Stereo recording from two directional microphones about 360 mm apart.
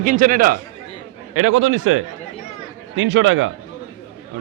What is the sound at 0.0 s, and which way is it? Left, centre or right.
Speech, right.